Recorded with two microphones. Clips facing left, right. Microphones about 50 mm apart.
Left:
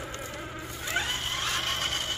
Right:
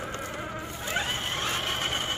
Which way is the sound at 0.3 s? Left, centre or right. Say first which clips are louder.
Right 3 dB; centre.